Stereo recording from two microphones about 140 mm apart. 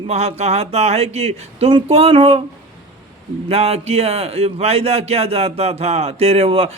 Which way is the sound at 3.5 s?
45° right (ahead or behind).